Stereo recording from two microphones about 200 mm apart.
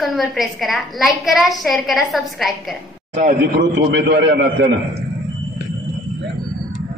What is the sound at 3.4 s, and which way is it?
A man's voice, 55° right (ahead or behind).